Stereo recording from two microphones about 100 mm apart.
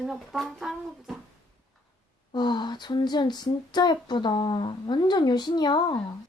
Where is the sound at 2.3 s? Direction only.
50° left (ahead or behind).